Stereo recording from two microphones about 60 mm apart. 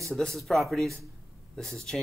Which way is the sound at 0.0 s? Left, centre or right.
Centre.